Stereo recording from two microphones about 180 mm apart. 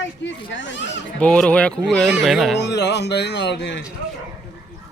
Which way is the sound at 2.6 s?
70° left (ahead or behind).